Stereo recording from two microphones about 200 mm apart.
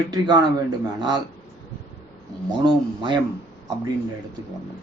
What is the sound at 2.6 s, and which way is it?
Speech, 25° right (ahead or behind).